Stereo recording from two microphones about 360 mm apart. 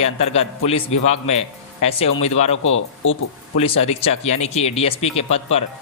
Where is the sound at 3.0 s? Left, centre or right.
Left.